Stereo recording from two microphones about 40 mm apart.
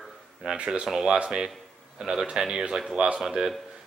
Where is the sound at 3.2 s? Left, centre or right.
Right.